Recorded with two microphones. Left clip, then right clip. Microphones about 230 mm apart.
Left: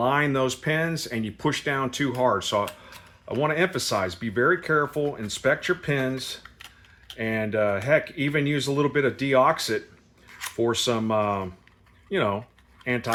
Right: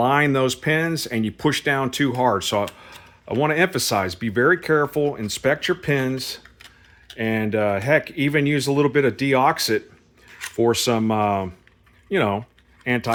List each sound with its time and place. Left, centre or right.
0.0 s speech: right